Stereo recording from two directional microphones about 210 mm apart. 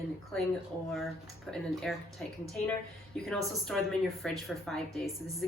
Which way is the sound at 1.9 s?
Centre (ahead or behind).